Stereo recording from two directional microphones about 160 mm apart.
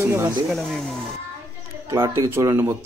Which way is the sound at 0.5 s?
Centre (ahead or behind).